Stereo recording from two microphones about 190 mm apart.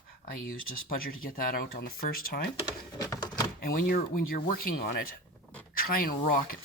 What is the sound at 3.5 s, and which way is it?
Speech, 50° left (ahead or behind).